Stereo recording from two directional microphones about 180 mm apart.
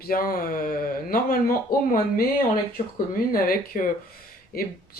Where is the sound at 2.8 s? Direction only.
35° left (ahead or behind).